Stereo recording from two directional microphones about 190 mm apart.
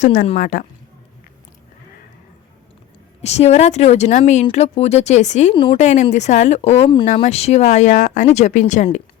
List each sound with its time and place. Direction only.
0.0 s speech: 40° left (ahead or behind)
3.2 s speech: 35° left (ahead or behind)